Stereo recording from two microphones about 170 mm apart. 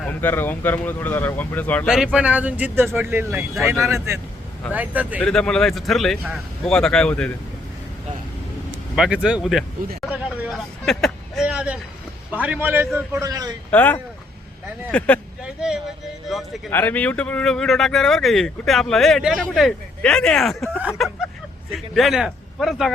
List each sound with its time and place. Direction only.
0.0 s speech: 10° left (ahead or behind)
2.1 s speech: 10° right (ahead or behind)
5.2 s speech: 5° left (ahead or behind)
9.0 s speech: 5° right (ahead or behind)
10.1 s vehicle: 5° right (ahead or behind)
10.8 s a sound: centre (ahead or behind)
12.3 s speech: 10° right (ahead or behind)
13.7 s speech: 10° left (ahead or behind)
15.4 s a sound: 5° right (ahead or behind)
16.3 s a man's voice: 10° left (ahead or behind)